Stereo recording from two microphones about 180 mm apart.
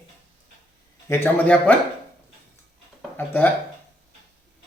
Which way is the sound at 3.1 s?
10° left (ahead or behind).